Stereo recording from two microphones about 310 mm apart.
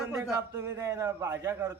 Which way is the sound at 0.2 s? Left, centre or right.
Centre.